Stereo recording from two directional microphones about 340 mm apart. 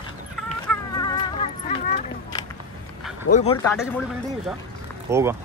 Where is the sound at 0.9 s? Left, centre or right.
Centre.